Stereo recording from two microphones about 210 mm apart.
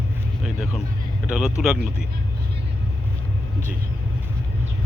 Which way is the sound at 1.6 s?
Centre (ahead or behind).